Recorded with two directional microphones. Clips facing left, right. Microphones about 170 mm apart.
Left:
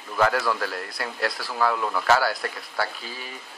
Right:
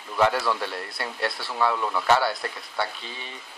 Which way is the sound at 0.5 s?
25° right (ahead or behind).